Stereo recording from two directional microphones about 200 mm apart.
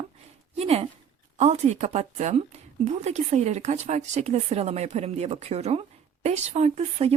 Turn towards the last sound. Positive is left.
turn(degrees=-30)  # may be behind; listen again after turning